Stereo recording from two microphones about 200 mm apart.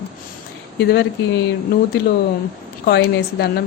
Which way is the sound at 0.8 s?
55° left (ahead or behind).